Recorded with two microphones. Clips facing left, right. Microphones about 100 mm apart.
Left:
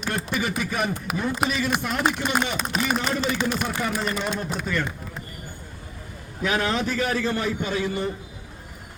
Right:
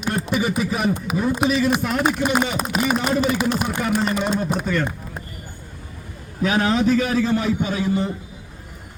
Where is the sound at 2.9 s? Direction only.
5° right (ahead or behind).